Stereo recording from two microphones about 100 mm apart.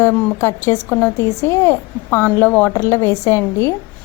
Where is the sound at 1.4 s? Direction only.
30° left (ahead or behind).